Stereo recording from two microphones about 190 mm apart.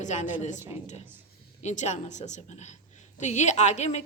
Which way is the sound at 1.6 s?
35° left (ahead or behind).